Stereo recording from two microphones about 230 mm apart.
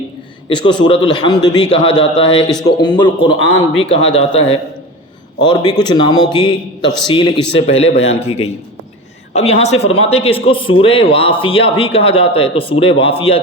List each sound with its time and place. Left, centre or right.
0.4 s a man's voice: left
9.3 s a man's voice: left